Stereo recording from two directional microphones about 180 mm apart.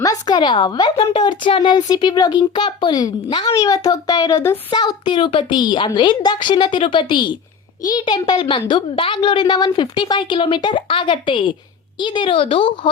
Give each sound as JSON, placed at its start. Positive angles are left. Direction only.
{"t": 0.0, "sound": "speech", "side_deg": 20}